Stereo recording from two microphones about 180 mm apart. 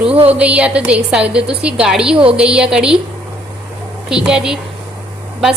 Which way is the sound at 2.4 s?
5° right (ahead or behind).